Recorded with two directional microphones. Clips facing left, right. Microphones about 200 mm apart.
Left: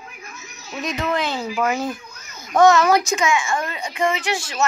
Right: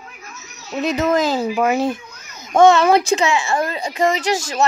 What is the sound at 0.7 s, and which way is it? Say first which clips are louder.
Speech: right 6 dB; 35° right (ahead or behind).